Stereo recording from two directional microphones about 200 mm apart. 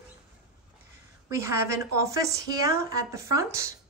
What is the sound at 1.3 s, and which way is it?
Speech, 15° right (ahead or behind).